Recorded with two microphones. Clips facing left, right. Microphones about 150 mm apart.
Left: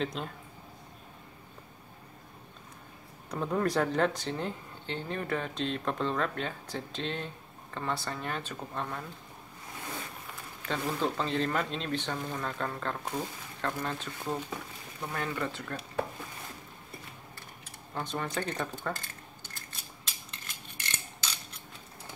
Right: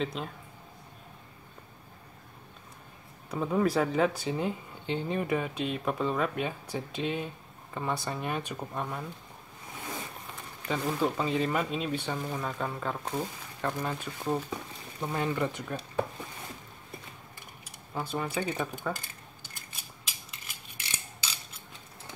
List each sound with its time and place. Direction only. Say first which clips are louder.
0.0 s speech: right 1 dB; centre (ahead or behind)
3.3 s speech: right 2 dB; 5° right (ahead or behind)
10.7 s speech: right 2 dB; 10° right (ahead or behind)
17.9 s a sound: right 2 dB; 10° right (ahead or behind)